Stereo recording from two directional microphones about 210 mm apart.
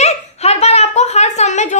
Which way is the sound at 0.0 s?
30° left (ahead or behind).